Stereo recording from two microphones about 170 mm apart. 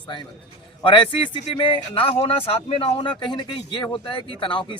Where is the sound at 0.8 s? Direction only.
30° left (ahead or behind).